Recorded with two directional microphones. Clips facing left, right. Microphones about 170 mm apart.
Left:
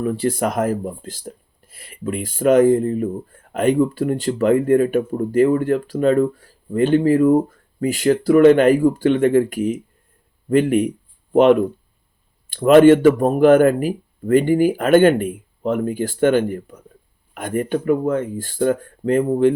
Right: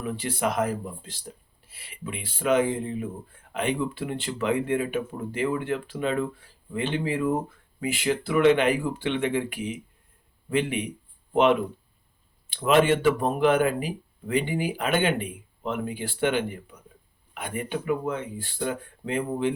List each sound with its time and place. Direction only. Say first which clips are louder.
0.0 s speech: left 8 dB; 40° left (ahead or behind)
12.5 s speech: left 11 dB; 50° left (ahead or behind)